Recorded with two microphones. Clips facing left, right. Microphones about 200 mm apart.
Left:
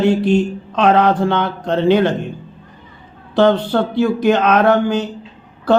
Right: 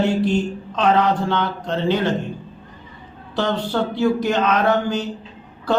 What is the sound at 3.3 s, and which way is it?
A woman's voice, 55° left (ahead or behind).